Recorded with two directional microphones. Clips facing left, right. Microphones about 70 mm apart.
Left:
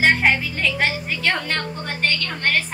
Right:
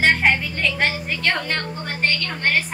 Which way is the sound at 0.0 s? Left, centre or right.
Centre.